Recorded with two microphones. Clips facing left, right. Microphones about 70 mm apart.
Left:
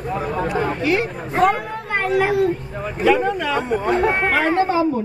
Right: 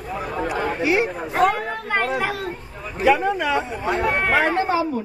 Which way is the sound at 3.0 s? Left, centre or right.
Centre.